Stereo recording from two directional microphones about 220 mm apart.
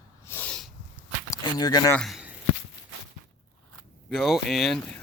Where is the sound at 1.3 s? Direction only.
15° left (ahead or behind).